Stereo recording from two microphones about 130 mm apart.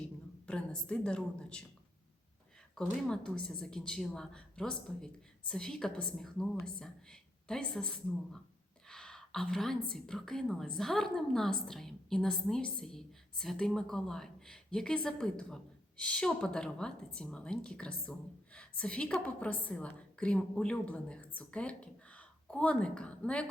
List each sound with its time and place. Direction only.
0.0 s speech: 10° left (ahead or behind)
2.7 s a woman's voice: 5° left (ahead or behind)